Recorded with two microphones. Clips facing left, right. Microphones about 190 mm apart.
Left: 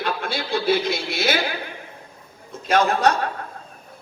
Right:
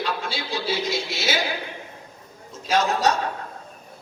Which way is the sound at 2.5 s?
55° left (ahead or behind).